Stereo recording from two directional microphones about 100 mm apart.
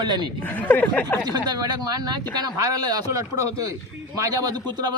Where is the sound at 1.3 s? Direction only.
40° right (ahead or behind).